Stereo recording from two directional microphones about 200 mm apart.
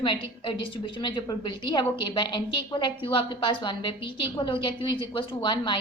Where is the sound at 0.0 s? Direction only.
25° left (ahead or behind).